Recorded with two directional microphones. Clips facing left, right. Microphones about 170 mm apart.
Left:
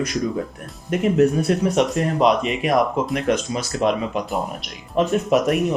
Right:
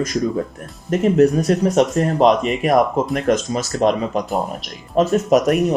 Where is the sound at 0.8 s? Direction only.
40° right (ahead or behind).